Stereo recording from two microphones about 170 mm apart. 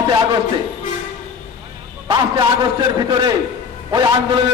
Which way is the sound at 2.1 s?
25° right (ahead or behind).